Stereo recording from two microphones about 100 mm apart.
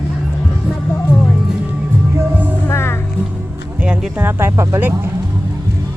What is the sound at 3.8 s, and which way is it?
Speech, 15° right (ahead or behind).